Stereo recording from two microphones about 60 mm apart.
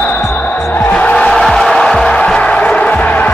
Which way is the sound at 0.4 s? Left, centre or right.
Left.